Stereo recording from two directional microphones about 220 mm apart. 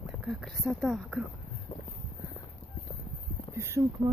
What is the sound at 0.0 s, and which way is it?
Speech, 5° right (ahead or behind).